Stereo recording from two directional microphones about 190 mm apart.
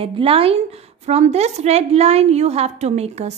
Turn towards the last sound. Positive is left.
turn(degrees=-35)  # may be behind; listen again after turning